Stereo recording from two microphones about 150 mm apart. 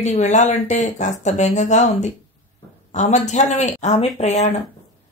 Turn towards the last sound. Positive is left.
turn(degrees=50)  # may be behind; listen again after turning